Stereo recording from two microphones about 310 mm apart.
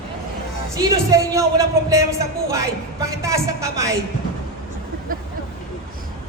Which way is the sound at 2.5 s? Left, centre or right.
Centre.